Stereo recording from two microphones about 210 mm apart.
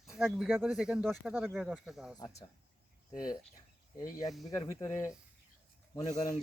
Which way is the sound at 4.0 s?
15° left (ahead or behind).